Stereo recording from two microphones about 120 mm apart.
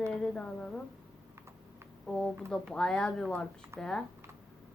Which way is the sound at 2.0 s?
5° left (ahead or behind).